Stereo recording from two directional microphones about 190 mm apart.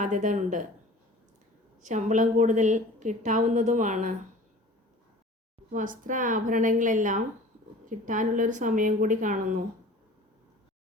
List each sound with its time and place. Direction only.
0.0 s a woman's voice: 40° right (ahead or behind)
1.8 s a woman's voice: 40° right (ahead or behind)
5.7 s a woman's voice: 45° right (ahead or behind)